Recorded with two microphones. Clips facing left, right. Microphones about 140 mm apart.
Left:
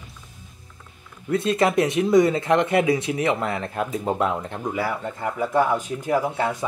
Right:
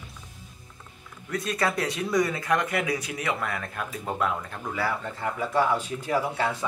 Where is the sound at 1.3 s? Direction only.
25° left (ahead or behind).